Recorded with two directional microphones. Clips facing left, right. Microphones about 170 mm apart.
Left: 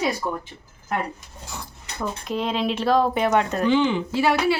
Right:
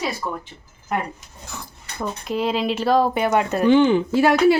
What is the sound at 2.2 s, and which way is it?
Speech, 5° right (ahead or behind).